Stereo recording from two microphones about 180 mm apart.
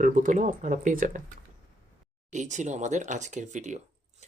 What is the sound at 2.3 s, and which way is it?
Speech, 40° right (ahead or behind).